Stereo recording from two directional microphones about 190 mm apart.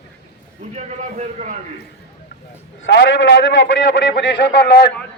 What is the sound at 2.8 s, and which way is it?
A man's voice, 70° left (ahead or behind).